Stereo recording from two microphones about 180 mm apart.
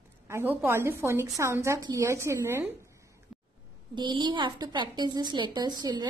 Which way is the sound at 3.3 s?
Centre (ahead or behind).